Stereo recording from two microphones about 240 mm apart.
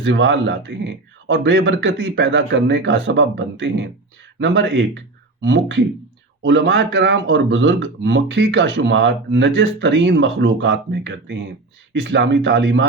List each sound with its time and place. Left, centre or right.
0.0 s speech: right